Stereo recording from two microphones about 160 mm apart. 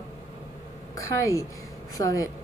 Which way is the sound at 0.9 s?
20° left (ahead or behind).